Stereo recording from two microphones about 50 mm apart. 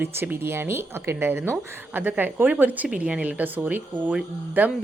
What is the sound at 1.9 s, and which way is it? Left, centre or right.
Speech, right.